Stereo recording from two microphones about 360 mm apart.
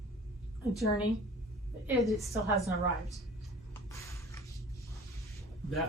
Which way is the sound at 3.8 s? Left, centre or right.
Centre.